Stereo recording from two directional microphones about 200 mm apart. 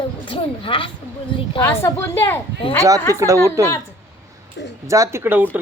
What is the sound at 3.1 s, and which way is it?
Speech, 15° right (ahead or behind).